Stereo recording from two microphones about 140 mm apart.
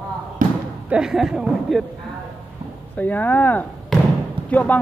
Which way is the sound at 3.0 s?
15° left (ahead or behind).